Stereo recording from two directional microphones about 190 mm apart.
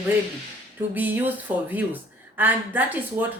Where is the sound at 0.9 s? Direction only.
10° right (ahead or behind).